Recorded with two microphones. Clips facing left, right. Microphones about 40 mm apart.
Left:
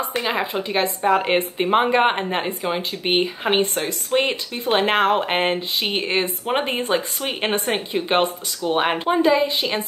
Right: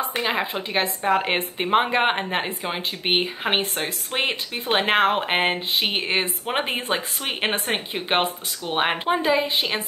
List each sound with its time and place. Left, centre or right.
0.1 s speech: centre